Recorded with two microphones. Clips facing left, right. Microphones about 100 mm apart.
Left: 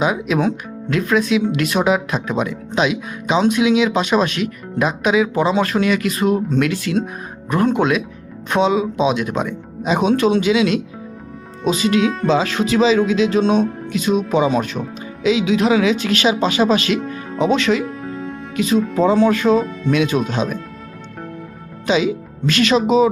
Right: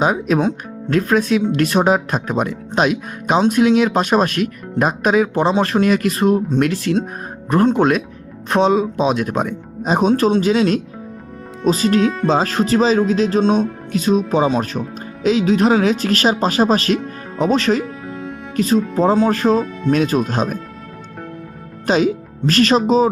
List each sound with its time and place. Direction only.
0.0 s speech: 40° right (ahead or behind)
11.8 s speech: 40° right (ahead or behind)
21.8 s speech: 45° right (ahead or behind)